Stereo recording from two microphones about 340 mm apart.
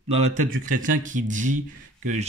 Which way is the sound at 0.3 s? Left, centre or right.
Right.